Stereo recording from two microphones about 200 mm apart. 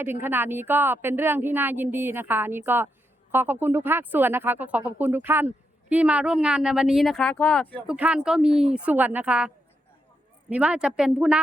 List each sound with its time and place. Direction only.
0.0 s speech: 10° right (ahead or behind); by 7.8 s 5° left (ahead or behind)
7.9 s speech: 5° right (ahead or behind)
10.5 s speech: 5° right (ahead or behind)